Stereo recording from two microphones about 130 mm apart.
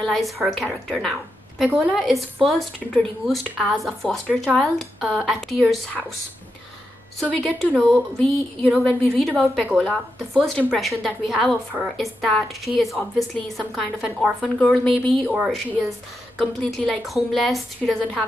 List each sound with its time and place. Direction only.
0.0 s speech: centre (ahead or behind)
7.2 s speech: 5° left (ahead or behind)